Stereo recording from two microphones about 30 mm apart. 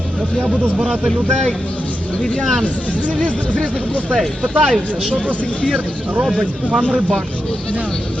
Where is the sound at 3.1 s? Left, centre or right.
Left.